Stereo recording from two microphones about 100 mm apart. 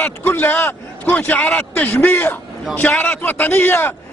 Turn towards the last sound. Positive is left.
turn(degrees=20)  # may be behind; listen again after turning